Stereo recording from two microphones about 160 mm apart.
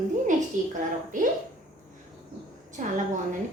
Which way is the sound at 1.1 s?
55° right (ahead or behind).